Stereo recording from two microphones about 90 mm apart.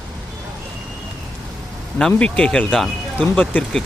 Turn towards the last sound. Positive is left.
turn(degrees=20)  # may be behind; listen again after turning